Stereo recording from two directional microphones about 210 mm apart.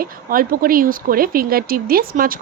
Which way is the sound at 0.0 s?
45° right (ahead or behind).